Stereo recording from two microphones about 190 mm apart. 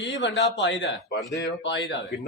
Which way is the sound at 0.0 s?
75° left (ahead or behind).